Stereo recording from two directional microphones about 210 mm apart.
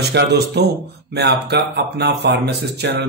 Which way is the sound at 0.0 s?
50° right (ahead or behind).